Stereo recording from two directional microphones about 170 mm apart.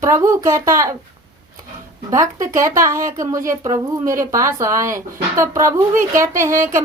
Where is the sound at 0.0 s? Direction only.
15° right (ahead or behind).